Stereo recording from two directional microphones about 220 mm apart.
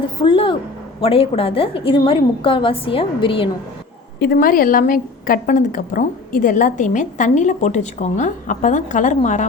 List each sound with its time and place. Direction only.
0.2 s a sound: 20° left (ahead or behind)
1.0 s a woman's voice: 25° left (ahead or behind)
4.2 s a woman's voice: 40° left (ahead or behind)